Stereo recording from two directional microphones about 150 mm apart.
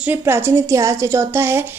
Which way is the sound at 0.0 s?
15° right (ahead or behind).